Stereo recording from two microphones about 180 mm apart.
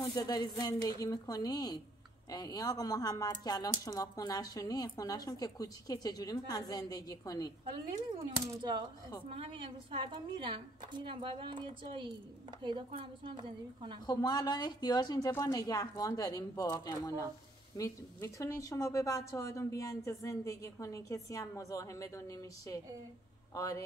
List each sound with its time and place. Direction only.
0.0 s a woman's voice: 20° left (ahead or behind)
9.3 s a woman's voice: 30° right (ahead or behind)
14.0 s a woman's voice: 20° left (ahead or behind)